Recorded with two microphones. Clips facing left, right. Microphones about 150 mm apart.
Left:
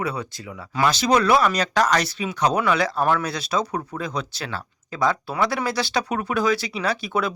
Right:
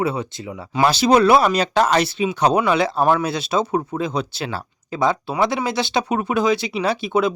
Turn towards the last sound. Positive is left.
turn(degrees=-20)  # may be behind; listen again after turning